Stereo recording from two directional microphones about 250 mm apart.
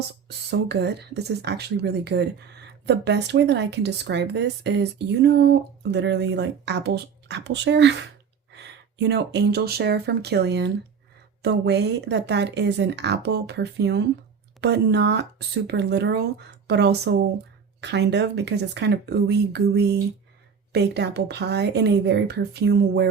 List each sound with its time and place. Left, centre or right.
0.3 s a woman's voice: right